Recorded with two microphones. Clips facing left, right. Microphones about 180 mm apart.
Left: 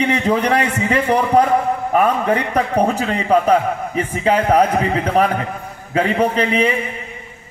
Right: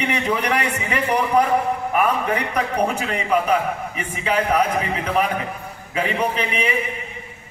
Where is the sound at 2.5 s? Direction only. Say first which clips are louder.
Left 5 dB; 35° left (ahead or behind).